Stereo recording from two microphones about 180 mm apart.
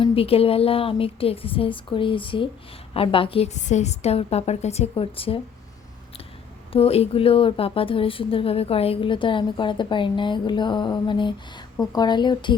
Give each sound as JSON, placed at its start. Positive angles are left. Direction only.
{"t": 0.0, "sound": "a woman's voice", "side_deg": 30}
{"t": 6.7, "sound": "speech", "side_deg": 35}